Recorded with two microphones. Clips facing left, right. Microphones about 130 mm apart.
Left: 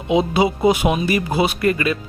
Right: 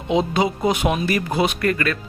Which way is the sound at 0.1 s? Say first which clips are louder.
Left 3 dB; 5° left (ahead or behind).